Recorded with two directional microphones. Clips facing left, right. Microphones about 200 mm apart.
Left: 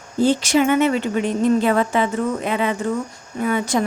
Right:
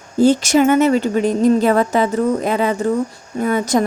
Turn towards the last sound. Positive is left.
turn(degrees=-40)  # may be behind; listen again after turning